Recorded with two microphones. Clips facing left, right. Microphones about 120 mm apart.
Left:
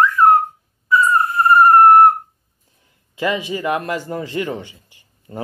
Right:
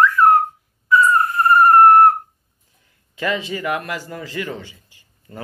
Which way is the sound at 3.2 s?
15° left (ahead or behind).